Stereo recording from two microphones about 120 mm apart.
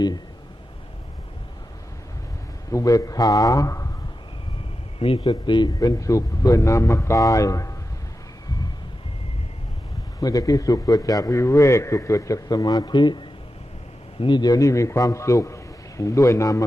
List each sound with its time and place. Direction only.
2.6 s a man's voice: 30° left (ahead or behind)
4.9 s a man's voice: 55° left (ahead or behind)
5.2 s a man's voice: 40° left (ahead or behind)
10.2 s a man's voice: 30° left (ahead or behind)
14.2 s a man's voice: 40° left (ahead or behind)